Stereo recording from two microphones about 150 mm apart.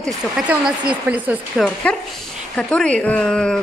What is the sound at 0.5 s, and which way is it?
Speech, 10° right (ahead or behind).